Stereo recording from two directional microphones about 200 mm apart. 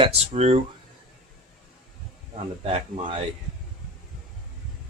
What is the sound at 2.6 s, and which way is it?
Speech, 30° right (ahead or behind).